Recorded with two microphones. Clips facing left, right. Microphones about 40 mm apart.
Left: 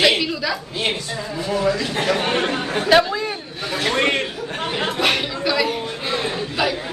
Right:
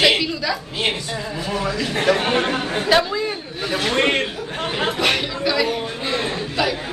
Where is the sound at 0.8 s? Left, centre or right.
Right.